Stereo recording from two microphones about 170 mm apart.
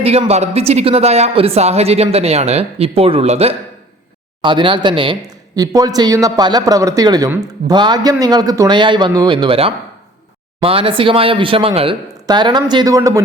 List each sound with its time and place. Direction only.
0.0 s a woman's voice: 35° right (ahead or behind); by 13.2 s 20° right (ahead or behind)